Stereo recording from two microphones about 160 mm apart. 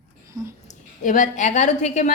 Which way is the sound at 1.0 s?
50° left (ahead or behind).